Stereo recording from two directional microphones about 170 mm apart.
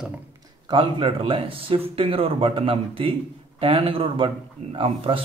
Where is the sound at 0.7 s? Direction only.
30° right (ahead or behind).